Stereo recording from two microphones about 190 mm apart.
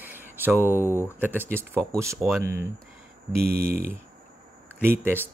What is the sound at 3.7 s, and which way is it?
Speech, 50° right (ahead or behind).